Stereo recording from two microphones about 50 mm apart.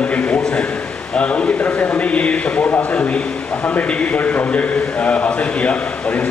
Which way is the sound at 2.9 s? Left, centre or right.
Left.